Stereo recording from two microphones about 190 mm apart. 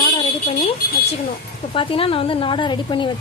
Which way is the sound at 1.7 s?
30° left (ahead or behind).